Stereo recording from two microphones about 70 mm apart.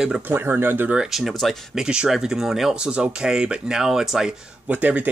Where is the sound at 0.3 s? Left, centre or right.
Right.